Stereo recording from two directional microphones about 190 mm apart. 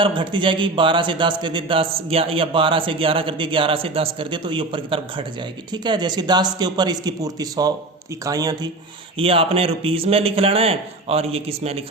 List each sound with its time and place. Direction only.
0.0 s speech: 25° right (ahead or behind)
9.1 s a man's voice: 30° right (ahead or behind)